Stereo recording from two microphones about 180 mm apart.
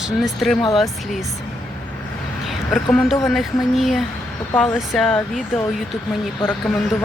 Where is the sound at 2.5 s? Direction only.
Centre (ahead or behind).